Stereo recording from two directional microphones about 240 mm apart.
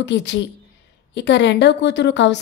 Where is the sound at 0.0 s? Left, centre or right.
Left.